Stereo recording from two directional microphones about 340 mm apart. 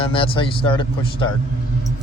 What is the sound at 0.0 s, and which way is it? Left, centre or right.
Speech, centre.